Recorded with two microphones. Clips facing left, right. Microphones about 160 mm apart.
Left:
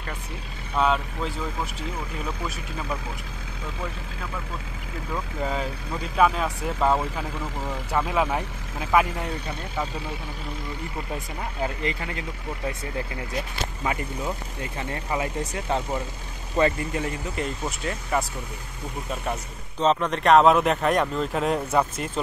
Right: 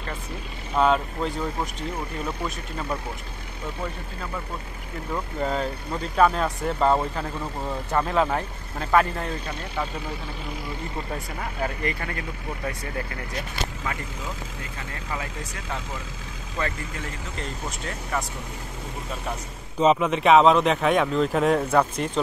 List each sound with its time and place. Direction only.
0.7 s speech: centre (ahead or behind)
5.1 s speech: 5° left (ahead or behind)
11.1 s speech: 20° left (ahead or behind)
15.0 s speech: 20° left (ahead or behind)
17.4 s speech: 10° left (ahead or behind)
19.8 s speech: 5° right (ahead or behind)